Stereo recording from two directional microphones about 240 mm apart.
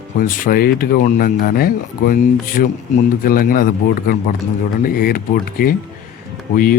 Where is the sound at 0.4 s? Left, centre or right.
Left.